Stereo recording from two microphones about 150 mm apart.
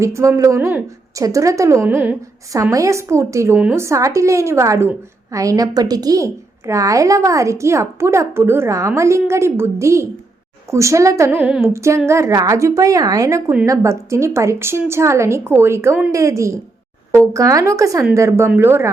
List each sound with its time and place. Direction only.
0.0 s a woman's voice: 20° right (ahead or behind)
3.6 s a woman's voice: 10° right (ahead or behind)
3.8 s a woman's voice: 20° right (ahead or behind)